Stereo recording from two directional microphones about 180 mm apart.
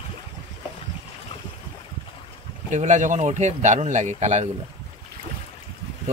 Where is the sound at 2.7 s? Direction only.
40° right (ahead or behind).